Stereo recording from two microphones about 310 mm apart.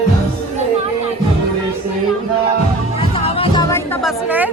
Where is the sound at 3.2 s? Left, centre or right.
Centre.